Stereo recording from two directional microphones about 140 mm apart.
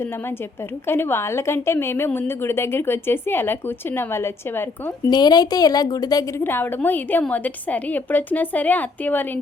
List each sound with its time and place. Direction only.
0.9 s a woman's voice: 15° left (ahead or behind)
5.0 s a woman's voice: 30° left (ahead or behind); by 9.4 s 10° left (ahead or behind)